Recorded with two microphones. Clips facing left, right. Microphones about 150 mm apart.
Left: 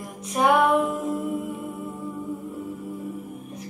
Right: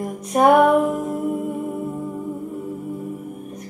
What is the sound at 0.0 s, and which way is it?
Music, 50° right (ahead or behind).